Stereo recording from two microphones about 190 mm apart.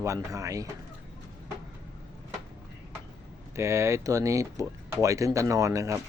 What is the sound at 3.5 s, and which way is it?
Speech, 15° right (ahead or behind).